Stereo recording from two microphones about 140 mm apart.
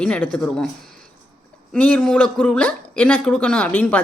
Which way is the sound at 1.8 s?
10° left (ahead or behind).